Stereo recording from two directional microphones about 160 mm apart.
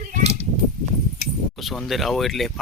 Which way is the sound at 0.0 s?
50° right (ahead or behind).